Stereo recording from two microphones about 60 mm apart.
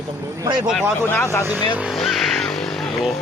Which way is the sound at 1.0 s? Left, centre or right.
Left.